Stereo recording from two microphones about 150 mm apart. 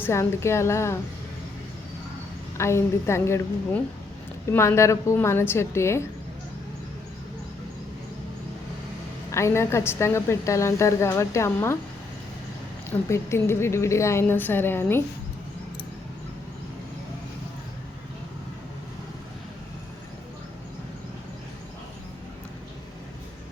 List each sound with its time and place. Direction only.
0.0 s a woman's voice: 20° left (ahead or behind)
2.6 s a woman's voice: 20° left (ahead or behind)
4.4 s a woman's voice: 15° left (ahead or behind)
9.3 s a woman's voice: 20° left (ahead or behind)
13.1 s a woman's voice: 20° left (ahead or behind)